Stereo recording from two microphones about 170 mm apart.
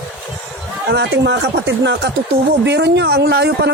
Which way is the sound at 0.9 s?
90° right.